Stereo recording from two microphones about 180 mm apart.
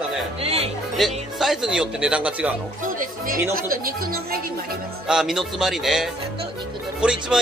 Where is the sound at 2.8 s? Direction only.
45° right (ahead or behind).